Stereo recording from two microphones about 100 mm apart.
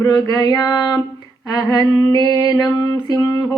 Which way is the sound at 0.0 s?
40° left (ahead or behind).